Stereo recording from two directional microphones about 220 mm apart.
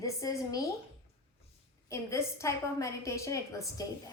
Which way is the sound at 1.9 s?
15° left (ahead or behind).